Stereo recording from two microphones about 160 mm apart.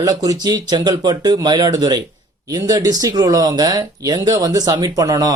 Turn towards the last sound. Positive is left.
turn(degrees=-20)  # may be behind; listen again after turning